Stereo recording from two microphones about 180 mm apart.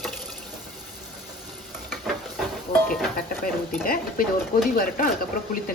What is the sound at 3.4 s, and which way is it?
Speech, 50° left (ahead or behind).